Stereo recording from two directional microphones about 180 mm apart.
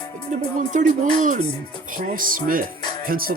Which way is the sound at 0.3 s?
40° right (ahead or behind).